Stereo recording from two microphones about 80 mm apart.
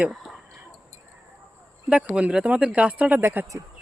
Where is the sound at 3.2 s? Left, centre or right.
Right.